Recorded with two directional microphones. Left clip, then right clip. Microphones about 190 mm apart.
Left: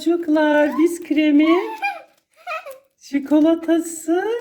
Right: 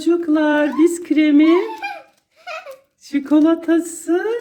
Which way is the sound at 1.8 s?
30° left (ahead or behind).